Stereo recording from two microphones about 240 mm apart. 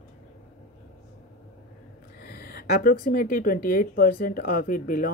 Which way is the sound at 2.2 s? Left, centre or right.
Left.